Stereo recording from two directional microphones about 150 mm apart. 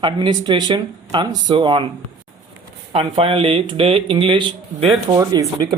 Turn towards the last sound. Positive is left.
turn(degrees=-25)  # may be behind; listen again after turning